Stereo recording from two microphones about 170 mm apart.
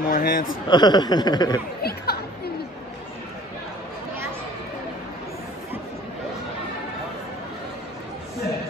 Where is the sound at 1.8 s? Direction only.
65° left (ahead or behind).